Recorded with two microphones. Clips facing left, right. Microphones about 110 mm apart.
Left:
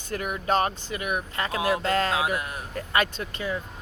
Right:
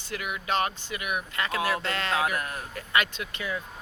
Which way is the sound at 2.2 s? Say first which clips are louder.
Left 1 dB; 20° left (ahead or behind).